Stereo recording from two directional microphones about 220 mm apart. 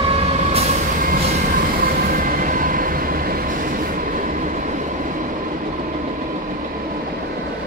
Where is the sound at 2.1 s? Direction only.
40° right (ahead or behind).